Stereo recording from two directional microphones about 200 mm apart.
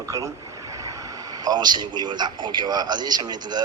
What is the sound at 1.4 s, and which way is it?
A man's voice, 20° right (ahead or behind).